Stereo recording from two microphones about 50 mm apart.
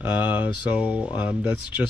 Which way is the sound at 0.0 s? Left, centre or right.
Right.